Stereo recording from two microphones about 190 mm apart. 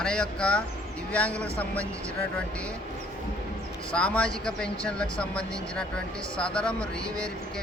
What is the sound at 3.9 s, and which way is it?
Speech, 5° left (ahead or behind).